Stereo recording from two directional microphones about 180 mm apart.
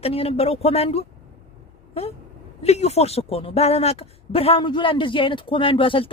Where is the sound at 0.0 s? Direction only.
35° left (ahead or behind).